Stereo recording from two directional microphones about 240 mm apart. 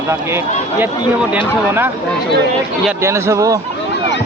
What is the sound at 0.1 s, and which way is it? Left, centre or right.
Speech, centre.